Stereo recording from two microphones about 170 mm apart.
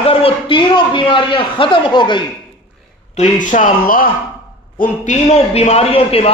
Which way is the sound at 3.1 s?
50° left (ahead or behind).